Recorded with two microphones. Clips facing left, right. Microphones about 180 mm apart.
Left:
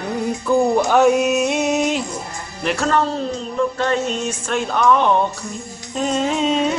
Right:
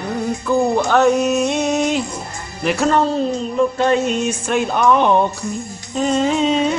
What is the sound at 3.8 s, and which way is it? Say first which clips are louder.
Speech: right 4 dB; 15° right (ahead or behind).